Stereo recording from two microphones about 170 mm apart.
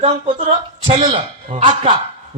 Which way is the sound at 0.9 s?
35° right (ahead or behind).